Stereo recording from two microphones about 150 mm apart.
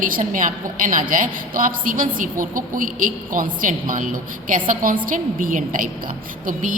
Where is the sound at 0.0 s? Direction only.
65° right (ahead or behind).